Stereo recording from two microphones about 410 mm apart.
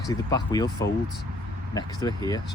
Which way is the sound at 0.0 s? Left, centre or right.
Centre.